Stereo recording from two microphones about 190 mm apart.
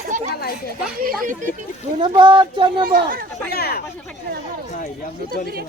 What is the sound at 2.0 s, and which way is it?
Speech, 25° right (ahead or behind).